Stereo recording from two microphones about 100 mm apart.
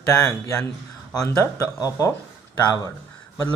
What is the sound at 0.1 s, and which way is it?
Speech, 30° left (ahead or behind).